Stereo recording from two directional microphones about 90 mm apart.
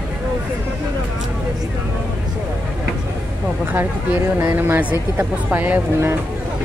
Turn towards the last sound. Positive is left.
turn(degrees=-25)  # may be behind; listen again after turning